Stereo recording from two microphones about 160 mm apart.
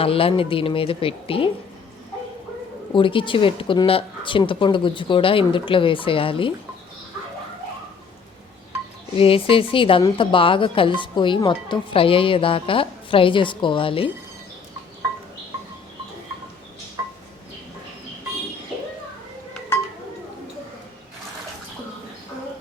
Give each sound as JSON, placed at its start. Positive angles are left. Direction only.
{"t": 0.0, "sound": "speech", "side_deg": 35}
{"t": 2.9, "sound": "speech", "side_deg": 30}
{"t": 9.1, "sound": "speech", "side_deg": 35}